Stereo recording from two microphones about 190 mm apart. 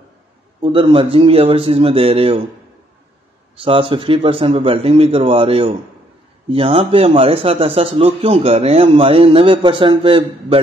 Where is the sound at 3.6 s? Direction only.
30° right (ahead or behind).